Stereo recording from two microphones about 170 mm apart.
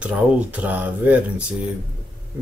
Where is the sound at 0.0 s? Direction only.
10° right (ahead or behind).